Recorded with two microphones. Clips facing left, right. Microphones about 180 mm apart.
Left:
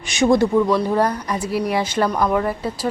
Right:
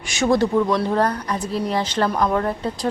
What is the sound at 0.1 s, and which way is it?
A woman's voice, 15° left (ahead or behind).